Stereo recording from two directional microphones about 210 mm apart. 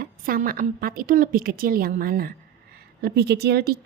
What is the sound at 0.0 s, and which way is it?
A woman's voice, 45° right (ahead or behind).